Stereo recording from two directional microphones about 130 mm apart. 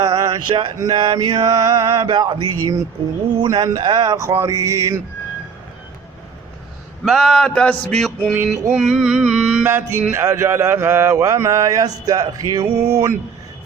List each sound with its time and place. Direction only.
0.0 s a sound: 30° right (ahead or behind)
0.8 s mantra: 30° right (ahead or behind)
3.3 s speech: 30° right (ahead or behind)
7.0 s a sound: centre (ahead or behind)
8.7 s music: 5° right (ahead or behind)
9.6 s speech: 20° right (ahead or behind)